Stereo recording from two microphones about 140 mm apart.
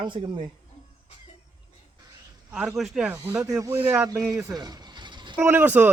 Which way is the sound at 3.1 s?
15° right (ahead or behind).